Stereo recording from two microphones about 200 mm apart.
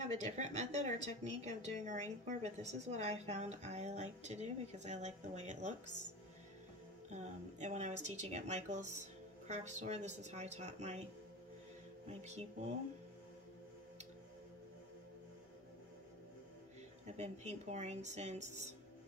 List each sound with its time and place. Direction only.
0.4 s a woman's voice: 35° right (ahead or behind)
7.1 s a woman's voice: 35° right (ahead or behind)
12.1 s a woman's voice: 35° right (ahead or behind)
17.2 s a woman's voice: 35° right (ahead or behind)